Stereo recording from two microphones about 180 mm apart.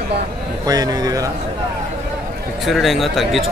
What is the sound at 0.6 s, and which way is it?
Speech, 20° right (ahead or behind).